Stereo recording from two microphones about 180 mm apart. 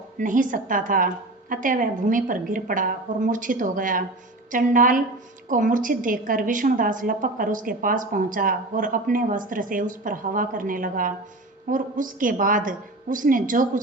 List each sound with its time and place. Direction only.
0.2 s a woman's voice: 45° right (ahead or behind)